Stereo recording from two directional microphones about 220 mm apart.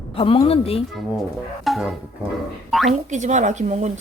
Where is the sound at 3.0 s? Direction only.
35° right (ahead or behind).